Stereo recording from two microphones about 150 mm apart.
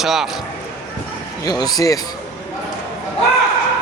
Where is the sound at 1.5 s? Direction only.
25° left (ahead or behind).